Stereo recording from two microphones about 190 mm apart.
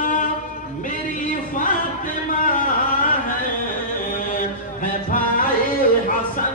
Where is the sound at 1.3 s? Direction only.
45° left (ahead or behind).